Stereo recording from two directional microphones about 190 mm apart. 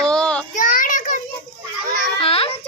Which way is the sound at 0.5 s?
45° left (ahead or behind).